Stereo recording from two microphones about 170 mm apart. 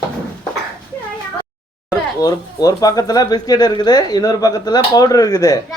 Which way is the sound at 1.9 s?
20° left (ahead or behind).